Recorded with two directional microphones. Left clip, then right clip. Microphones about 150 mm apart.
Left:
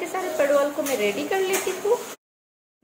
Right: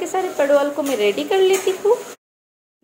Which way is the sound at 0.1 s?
50° right (ahead or behind).